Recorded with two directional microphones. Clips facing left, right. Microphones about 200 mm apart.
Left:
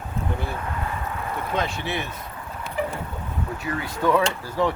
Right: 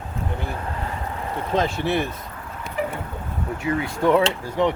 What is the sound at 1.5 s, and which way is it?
Speech, 55° right (ahead or behind).